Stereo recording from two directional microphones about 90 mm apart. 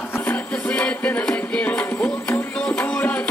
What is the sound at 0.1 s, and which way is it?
Music, 20° left (ahead or behind).